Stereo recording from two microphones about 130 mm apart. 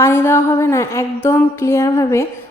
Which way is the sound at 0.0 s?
20° left (ahead or behind).